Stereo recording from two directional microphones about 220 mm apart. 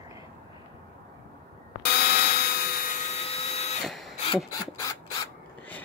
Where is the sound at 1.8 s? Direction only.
45° left (ahead or behind); by 3.8 s 30° left (ahead or behind).